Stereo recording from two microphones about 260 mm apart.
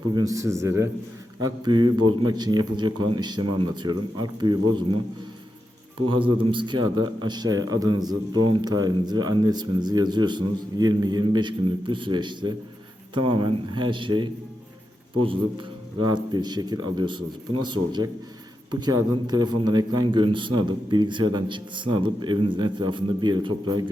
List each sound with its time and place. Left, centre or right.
0.1 s a man's voice: centre
6.1 s a man's voice: centre